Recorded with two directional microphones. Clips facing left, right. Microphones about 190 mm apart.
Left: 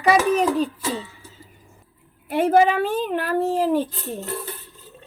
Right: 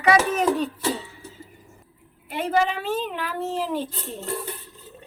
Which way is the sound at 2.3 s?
50° left (ahead or behind).